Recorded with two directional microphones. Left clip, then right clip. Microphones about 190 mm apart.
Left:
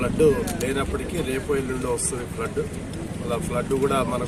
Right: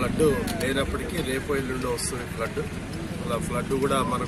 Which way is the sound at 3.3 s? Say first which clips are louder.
Left 3 dB; centre (ahead or behind).